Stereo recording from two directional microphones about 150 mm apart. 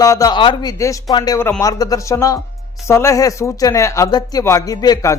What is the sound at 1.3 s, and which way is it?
Speech, 15° left (ahead or behind).